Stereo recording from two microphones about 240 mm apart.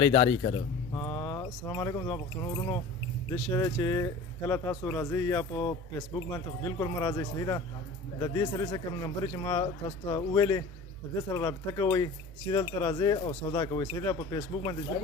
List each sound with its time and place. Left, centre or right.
0.0 s speech: centre